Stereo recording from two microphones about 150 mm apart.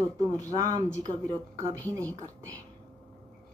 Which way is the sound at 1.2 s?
25° right (ahead or behind).